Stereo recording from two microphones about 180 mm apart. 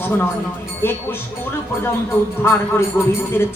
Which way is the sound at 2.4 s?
15° left (ahead or behind).